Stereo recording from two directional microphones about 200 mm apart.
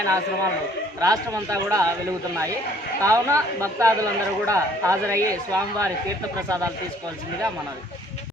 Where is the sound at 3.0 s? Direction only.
15° right (ahead or behind).